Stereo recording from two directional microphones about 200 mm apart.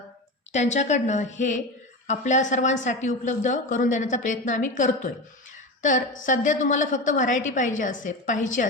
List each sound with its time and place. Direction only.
0.5 s a woman's voice: 35° left (ahead or behind)